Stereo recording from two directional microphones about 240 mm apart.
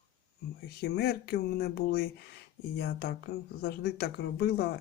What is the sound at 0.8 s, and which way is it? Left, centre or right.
Speech, left.